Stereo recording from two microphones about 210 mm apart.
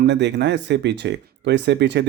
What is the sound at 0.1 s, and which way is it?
Speech, 55° right (ahead or behind).